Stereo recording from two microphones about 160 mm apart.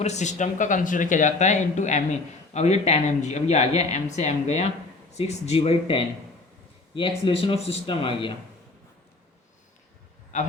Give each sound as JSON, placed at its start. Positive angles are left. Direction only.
{"t": 0.0, "sound": "speech", "side_deg": 45}
{"t": 10.3, "sound": "a man's voice", "side_deg": 50}